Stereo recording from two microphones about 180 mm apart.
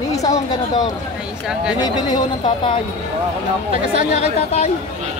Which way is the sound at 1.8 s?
25° left (ahead or behind).